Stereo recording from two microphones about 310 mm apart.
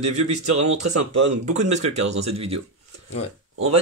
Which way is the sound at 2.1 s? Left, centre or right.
Centre.